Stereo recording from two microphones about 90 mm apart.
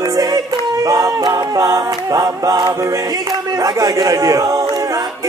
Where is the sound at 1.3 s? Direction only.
40° right (ahead or behind).